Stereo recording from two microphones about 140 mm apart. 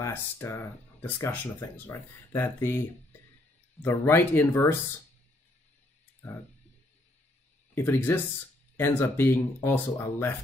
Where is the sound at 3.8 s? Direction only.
15° left (ahead or behind).